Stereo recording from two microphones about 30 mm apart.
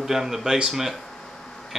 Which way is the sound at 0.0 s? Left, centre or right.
Centre.